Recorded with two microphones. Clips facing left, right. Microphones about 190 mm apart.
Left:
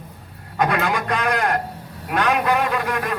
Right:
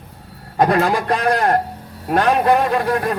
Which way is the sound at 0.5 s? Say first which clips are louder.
Right 5 dB; 35° right (ahead or behind).